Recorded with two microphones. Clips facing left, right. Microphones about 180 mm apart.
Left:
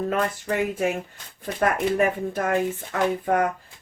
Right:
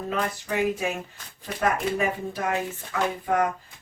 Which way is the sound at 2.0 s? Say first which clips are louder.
Left 4 dB; 50° left (ahead or behind).